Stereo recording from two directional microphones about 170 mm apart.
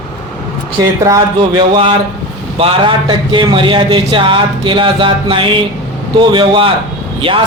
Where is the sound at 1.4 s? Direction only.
30° right (ahead or behind).